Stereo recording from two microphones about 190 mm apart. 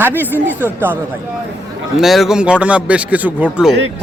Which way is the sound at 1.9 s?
Centre (ahead or behind).